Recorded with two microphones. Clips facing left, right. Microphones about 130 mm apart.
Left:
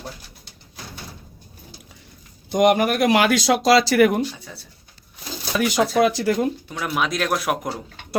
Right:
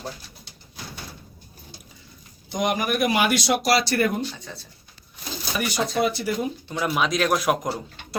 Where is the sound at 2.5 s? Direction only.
70° left (ahead or behind); by 4.2 s 90° left.